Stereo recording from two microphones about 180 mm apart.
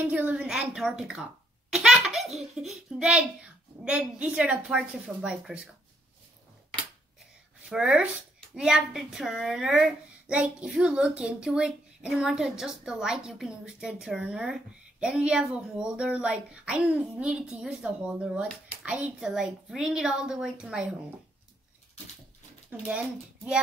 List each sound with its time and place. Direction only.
0.0 s a woman's voice: 10° right (ahead or behind)
7.7 s a woman's voice: 5° right (ahead or behind)
22.7 s a woman's voice: 5° right (ahead or behind)